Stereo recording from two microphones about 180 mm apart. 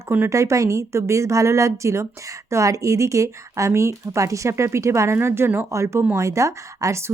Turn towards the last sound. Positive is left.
turn(degrees=-15)  # may be behind; listen again after turning